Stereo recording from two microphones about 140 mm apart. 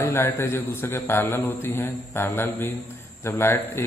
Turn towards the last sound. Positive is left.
turn(degrees=15)  # may be behind; listen again after turning